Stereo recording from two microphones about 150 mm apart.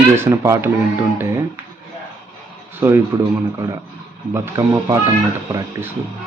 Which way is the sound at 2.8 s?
15° right (ahead or behind).